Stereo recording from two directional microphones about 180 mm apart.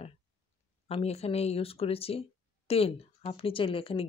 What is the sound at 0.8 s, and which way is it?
Speech, 35° left (ahead or behind).